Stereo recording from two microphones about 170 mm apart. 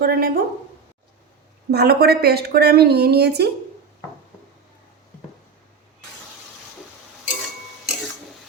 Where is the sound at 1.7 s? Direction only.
70° right (ahead or behind).